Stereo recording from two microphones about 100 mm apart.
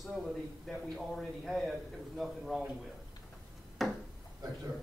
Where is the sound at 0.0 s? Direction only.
Centre (ahead or behind).